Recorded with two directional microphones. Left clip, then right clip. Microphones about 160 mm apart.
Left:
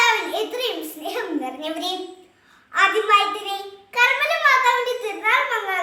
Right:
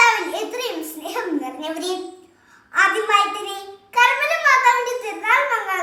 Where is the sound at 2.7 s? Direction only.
20° left (ahead or behind).